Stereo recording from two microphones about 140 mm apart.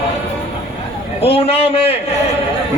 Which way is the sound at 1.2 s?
45° left (ahead or behind).